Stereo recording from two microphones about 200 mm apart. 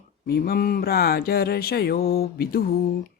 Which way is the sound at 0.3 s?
50° left (ahead or behind).